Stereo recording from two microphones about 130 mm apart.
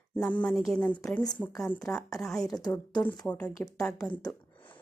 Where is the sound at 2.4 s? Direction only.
30° left (ahead or behind).